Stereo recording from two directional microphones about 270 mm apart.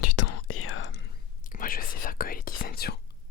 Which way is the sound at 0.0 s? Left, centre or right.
Left.